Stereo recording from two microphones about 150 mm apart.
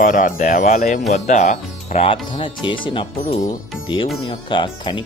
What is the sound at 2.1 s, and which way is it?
Speech, 35° left (ahead or behind).